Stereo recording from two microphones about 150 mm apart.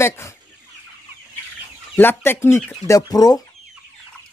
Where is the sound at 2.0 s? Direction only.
15° left (ahead or behind).